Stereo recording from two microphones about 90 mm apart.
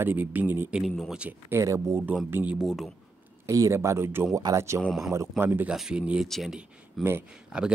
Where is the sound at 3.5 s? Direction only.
35° right (ahead or behind).